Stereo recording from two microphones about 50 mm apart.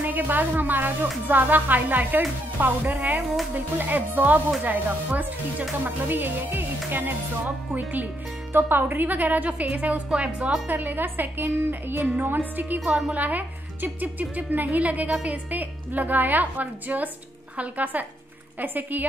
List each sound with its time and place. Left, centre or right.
0.0 s speech: right
8.5 s speech: right
10.0 s speech: centre
10.7 s speech: right